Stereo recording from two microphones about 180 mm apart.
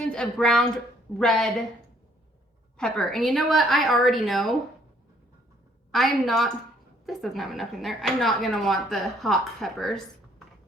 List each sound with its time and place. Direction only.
0.0 s a woman's voice: 5° left (ahead or behind)
2.7 s a woman's voice: 5° left (ahead or behind)
5.9 s a woman's voice: centre (ahead or behind)